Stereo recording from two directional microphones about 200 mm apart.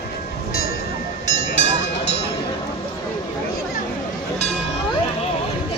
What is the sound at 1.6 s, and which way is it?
Vehicle, 65° left (ahead or behind).